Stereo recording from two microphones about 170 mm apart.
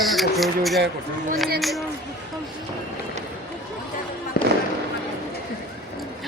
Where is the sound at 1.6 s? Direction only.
Centre (ahead or behind).